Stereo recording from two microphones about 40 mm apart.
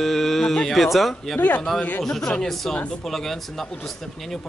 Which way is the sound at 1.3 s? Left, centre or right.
Left.